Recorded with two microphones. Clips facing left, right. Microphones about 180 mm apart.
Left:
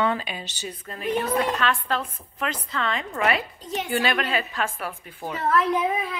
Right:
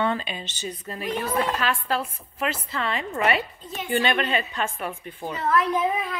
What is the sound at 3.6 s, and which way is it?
Speech, 85° left.